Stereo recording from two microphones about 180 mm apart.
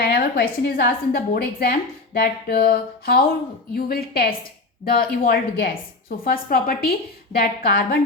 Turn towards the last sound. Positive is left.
turn(degrees=55)  # may be behind; listen again after turning